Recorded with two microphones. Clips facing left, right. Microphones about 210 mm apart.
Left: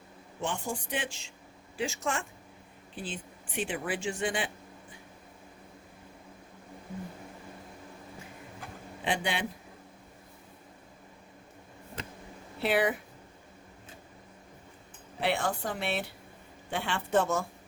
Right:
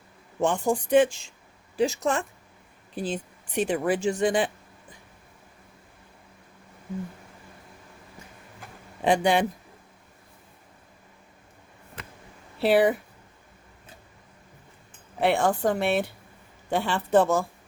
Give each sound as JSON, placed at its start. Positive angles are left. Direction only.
{"t": 0.4, "sound": "a woman's voice", "side_deg": -45}
{"t": 9.0, "sound": "a woman's voice", "side_deg": -45}
{"t": 12.6, "sound": "speech", "side_deg": -35}
{"t": 15.2, "sound": "a woman's voice", "side_deg": -50}
{"t": 16.6, "sound": "speech", "side_deg": -40}